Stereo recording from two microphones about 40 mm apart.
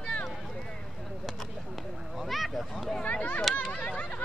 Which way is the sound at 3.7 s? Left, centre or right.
Left.